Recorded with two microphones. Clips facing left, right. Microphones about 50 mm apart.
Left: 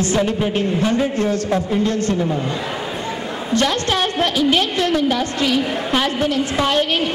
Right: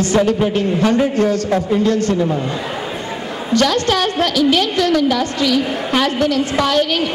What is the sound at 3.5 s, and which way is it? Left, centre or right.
A woman's voice, left.